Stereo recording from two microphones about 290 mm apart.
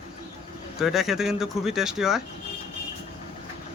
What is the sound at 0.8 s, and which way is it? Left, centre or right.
Speech, centre.